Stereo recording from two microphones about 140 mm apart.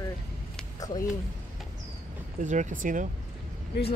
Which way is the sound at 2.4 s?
60° right (ahead or behind).